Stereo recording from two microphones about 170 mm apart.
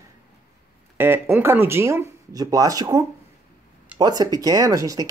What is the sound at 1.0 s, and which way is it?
Speech, 10° right (ahead or behind).